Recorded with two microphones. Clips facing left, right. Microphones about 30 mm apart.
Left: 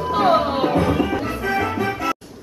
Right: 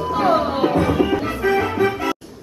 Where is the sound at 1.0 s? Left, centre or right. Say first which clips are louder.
Right 3 dB; centre.